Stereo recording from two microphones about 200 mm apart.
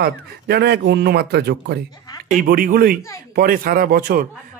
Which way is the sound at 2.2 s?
45° right (ahead or behind).